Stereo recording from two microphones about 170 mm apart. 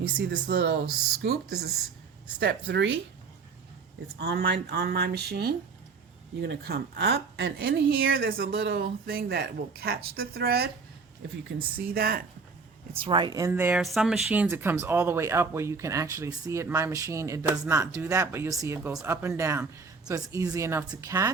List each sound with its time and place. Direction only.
0.0 s a woman's voice: 60° right (ahead or behind)
4.2 s a woman's voice: 75° right (ahead or behind); by 8.4 s 60° right (ahead or behind)
8.5 s speech: 80° right
11.9 s speech: 60° right (ahead or behind)
13.0 s speech: 30° right (ahead or behind)